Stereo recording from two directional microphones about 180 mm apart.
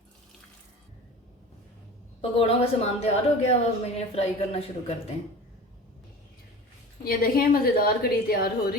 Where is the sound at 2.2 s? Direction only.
35° left (ahead or behind).